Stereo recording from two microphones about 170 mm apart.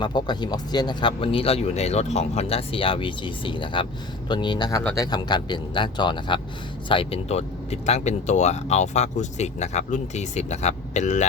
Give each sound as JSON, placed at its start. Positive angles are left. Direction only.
{"t": 0.0, "sound": "speech", "side_deg": 25}